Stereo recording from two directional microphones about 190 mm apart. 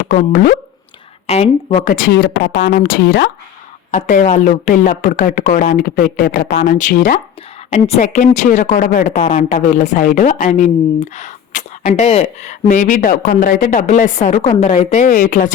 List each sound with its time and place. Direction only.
0.1 s speech: 50° left (ahead or behind)
1.3 s speech: 35° left (ahead or behind); by 3.2 s 55° left (ahead or behind)
3.9 s speech: 40° left (ahead or behind)